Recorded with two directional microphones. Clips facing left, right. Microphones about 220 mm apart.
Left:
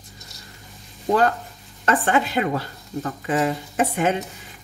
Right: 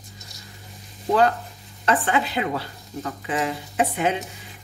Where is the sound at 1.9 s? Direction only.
45° left (ahead or behind).